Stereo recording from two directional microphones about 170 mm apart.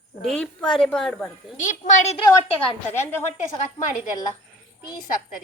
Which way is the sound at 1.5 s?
50° left (ahead or behind).